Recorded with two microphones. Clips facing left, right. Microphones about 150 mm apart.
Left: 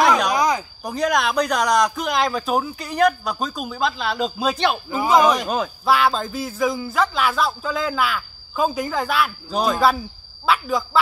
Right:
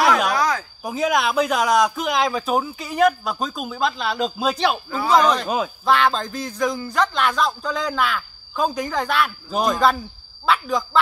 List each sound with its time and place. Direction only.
0.0 s snake: centre (ahead or behind)
0.3 s snake: 20° left (ahead or behind)
0.8 s speech: 5° right (ahead or behind)